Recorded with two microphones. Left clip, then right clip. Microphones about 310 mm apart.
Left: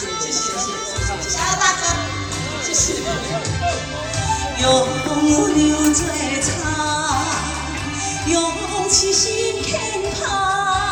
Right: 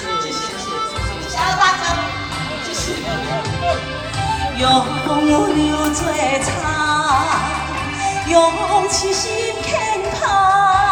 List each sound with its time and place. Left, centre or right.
1.4 s music: centre
4.3 s music: centre